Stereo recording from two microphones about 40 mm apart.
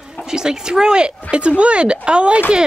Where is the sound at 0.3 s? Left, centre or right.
Centre.